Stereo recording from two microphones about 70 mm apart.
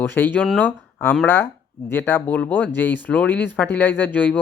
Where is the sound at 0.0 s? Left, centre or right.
Left.